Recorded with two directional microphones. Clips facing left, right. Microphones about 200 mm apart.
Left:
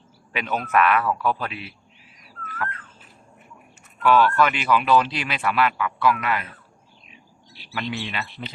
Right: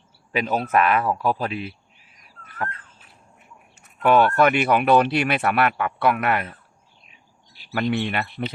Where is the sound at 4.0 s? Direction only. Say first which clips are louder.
Right 2 dB; 55° right (ahead or behind).